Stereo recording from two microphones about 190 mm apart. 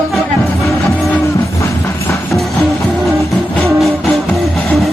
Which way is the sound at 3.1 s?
Centre (ahead or behind).